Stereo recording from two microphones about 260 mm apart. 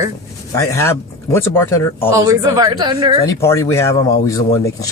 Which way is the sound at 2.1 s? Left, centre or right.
Centre.